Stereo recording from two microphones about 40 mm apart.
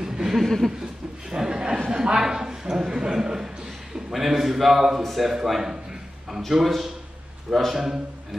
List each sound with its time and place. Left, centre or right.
0.0 s chuckle: centre
0.4 s a sound: centre
1.3 s a man's voice: centre
5.5 s a man's voice: centre